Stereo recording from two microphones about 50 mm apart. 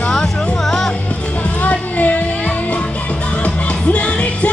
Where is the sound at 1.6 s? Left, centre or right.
Left.